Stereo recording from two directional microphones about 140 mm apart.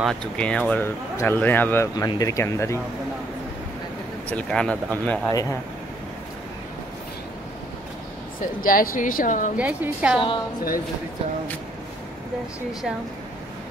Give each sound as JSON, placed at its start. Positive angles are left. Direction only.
{"t": 0.0, "sound": "speech", "side_deg": 5}
{"t": 2.0, "sound": "speech", "side_deg": 25}
{"t": 4.3, "sound": "speech", "side_deg": 10}
{"t": 5.3, "sound": "speech", "side_deg": 25}
{"t": 8.4, "sound": "speech", "side_deg": 85}
{"t": 9.6, "sound": "a woman's voice", "side_deg": -10}